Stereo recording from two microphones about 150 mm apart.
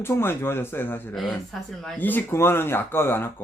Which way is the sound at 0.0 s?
15° left (ahead or behind).